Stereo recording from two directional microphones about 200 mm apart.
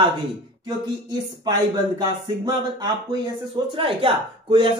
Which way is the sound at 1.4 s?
20° right (ahead or behind).